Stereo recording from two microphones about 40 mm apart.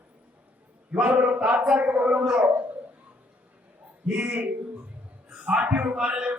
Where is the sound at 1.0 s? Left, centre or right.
Right.